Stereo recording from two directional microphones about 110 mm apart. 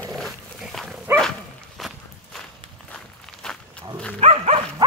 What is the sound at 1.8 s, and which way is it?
Walk, centre (ahead or behind).